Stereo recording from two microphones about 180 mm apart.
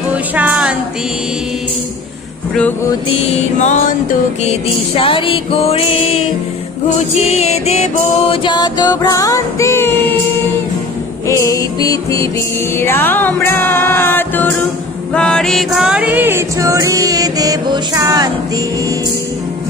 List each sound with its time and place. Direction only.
0.1 s a sound: 10° right (ahead or behind)
3.3 s music: 40° left (ahead or behind)
4.9 s music: 30° left (ahead or behind)
7.2 s music: 35° left (ahead or behind)
8.5 s music: 25° left (ahead or behind)
11.2 s music: 15° left (ahead or behind); by 18.3 s 20° right (ahead or behind)